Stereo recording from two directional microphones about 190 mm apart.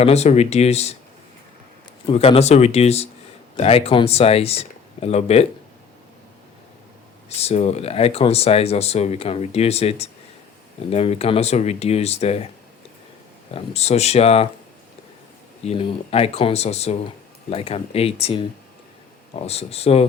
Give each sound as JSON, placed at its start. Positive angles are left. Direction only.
{"t": 0.0, "sound": "speech", "side_deg": 35}
{"t": 2.0, "sound": "speech", "side_deg": 30}
{"t": 7.3, "sound": "speech", "side_deg": 35}
{"t": 13.5, "sound": "speech", "side_deg": 35}
{"t": 15.6, "sound": "speech", "side_deg": 30}